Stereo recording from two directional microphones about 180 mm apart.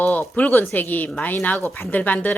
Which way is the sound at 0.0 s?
10° left (ahead or behind).